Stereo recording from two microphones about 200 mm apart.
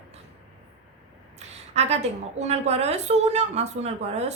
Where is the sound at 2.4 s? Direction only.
35° right (ahead or behind).